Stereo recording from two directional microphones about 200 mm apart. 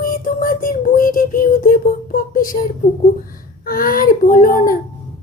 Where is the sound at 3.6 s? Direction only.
45° left (ahead or behind).